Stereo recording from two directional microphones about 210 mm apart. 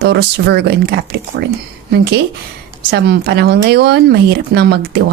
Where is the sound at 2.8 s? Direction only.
50° right (ahead or behind).